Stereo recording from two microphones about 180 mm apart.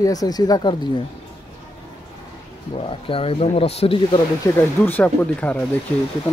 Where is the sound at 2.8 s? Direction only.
30° left (ahead or behind).